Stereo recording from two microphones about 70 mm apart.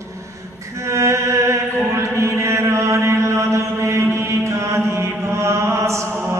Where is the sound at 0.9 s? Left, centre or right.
Right.